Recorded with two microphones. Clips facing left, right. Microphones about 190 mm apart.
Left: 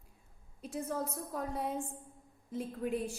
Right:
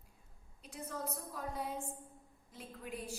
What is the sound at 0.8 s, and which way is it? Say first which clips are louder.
A woman's voice: left 2 dB; 55° left (ahead or behind).